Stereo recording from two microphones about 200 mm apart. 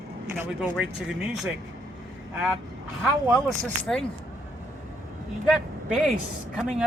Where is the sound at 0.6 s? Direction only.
5° right (ahead or behind).